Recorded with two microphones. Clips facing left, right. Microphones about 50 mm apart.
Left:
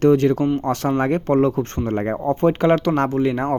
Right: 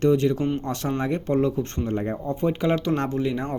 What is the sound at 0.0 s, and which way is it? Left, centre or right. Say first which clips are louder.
Speech: left 5 dB; left.